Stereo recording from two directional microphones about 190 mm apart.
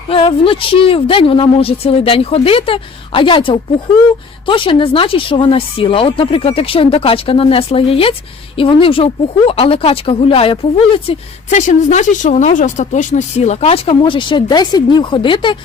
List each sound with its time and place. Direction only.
0.1 s speech: 30° left (ahead or behind)